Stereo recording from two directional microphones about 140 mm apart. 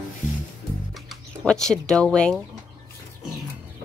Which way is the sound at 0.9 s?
Centre (ahead or behind).